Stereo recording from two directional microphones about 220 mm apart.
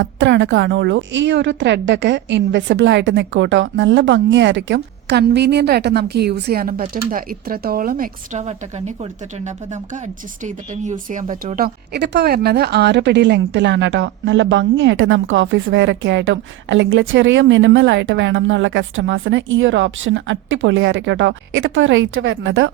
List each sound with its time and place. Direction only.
0.0 s a woman's voice: 55° right (ahead or behind)